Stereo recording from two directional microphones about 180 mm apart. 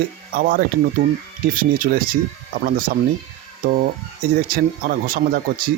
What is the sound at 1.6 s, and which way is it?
Speech, 50° right (ahead or behind).